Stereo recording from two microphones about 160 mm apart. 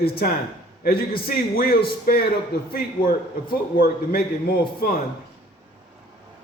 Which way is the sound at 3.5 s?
70° left (ahead or behind).